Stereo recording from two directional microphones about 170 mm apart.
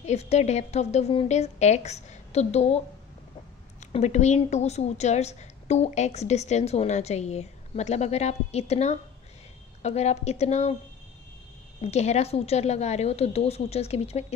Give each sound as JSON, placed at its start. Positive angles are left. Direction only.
{"t": 0.0, "sound": "a woman's voice", "side_deg": 40}
{"t": 3.9, "sound": "a woman's voice", "side_deg": 45}
{"t": 11.8, "sound": "a woman's voice", "side_deg": 40}